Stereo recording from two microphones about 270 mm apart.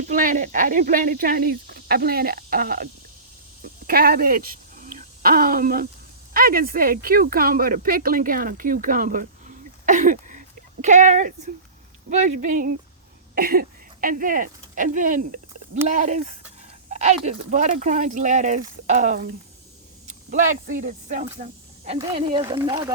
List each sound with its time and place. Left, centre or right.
0.1 s speech: right
20.3 s speech: right
21.9 s speech: centre